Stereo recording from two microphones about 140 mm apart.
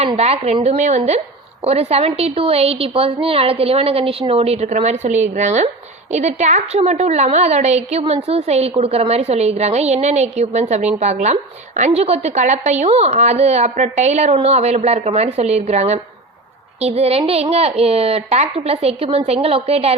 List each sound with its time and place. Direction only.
0.2 s a woman's voice: 50° right (ahead or behind)